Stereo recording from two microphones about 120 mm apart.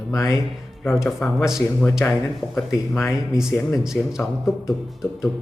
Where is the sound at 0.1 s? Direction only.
25° left (ahead or behind).